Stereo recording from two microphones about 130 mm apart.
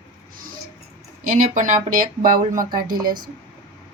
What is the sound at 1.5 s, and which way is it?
Speech, 80° right.